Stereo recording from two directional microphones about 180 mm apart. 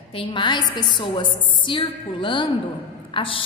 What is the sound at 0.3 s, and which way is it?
A woman's voice, 25° left (ahead or behind).